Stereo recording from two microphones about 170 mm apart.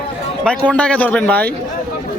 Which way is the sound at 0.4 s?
5° left (ahead or behind).